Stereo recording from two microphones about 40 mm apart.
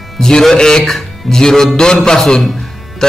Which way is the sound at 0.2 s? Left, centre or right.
Centre.